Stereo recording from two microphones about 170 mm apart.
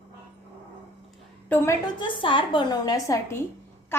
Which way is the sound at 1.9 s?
30° left (ahead or behind).